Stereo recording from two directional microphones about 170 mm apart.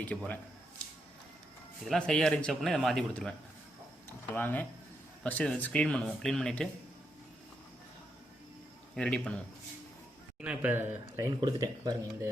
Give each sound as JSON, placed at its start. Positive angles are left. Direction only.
{"t": 0.1, "sound": "speech", "side_deg": 5}
{"t": 1.8, "sound": "speech", "side_deg": 5}
{"t": 4.4, "sound": "speech", "side_deg": 10}
{"t": 9.0, "sound": "speech", "side_deg": 5}
{"t": 10.4, "sound": "speech", "side_deg": -10}
{"t": 11.4, "sound": "speech", "side_deg": -25}